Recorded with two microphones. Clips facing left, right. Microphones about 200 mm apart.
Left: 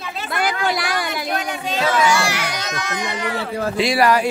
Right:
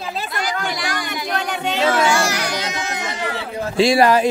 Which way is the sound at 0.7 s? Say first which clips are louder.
Left 2 dB; 60° left (ahead or behind).